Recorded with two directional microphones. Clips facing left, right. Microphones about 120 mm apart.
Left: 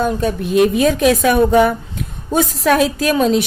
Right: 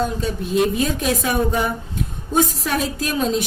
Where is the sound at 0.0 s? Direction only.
55° left (ahead or behind).